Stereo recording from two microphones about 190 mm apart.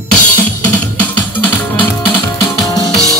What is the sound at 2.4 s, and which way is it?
Music, 20° left (ahead or behind).